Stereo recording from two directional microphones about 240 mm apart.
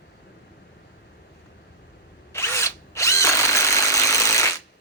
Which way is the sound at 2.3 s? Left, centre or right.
Centre.